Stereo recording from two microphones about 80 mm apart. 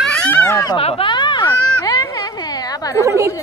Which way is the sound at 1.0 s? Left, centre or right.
Left.